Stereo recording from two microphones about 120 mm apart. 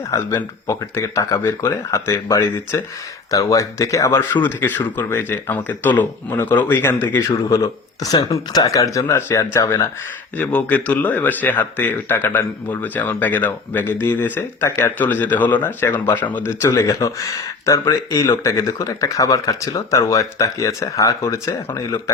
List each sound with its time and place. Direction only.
0.1 s speech: 25° left (ahead or behind)
10.3 s speech: 15° left (ahead or behind)